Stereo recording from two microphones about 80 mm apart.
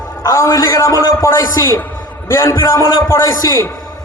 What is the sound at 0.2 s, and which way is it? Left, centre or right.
A man's voice, left.